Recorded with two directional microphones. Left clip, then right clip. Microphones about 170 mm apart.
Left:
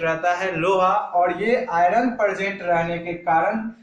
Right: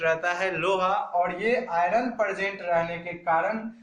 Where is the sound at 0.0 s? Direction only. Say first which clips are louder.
Left 4 dB; 15° right (ahead or behind).